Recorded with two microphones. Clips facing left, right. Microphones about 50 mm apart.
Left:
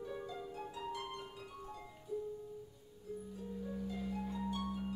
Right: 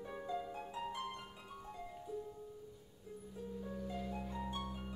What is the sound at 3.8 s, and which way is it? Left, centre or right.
Harp, centre.